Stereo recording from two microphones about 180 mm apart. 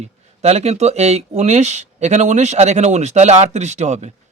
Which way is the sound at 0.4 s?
35° right (ahead or behind).